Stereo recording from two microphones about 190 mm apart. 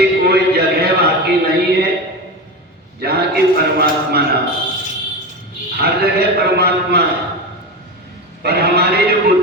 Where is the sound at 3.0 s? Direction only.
55° right (ahead or behind).